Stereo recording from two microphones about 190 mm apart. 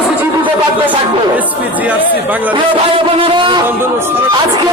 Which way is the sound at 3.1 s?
25° right (ahead or behind).